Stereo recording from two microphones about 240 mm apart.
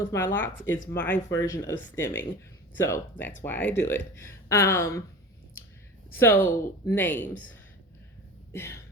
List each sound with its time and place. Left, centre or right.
0.0 s speech: centre
6.1 s speech: centre
6.4 s speech: left
6.8 s speech: centre
8.5 s speech: centre